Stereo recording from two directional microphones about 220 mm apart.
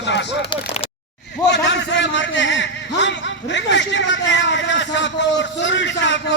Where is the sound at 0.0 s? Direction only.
55° left (ahead or behind).